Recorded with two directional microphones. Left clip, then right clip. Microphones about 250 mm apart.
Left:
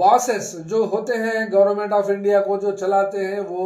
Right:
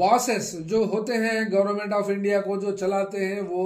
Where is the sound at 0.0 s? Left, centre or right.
Right.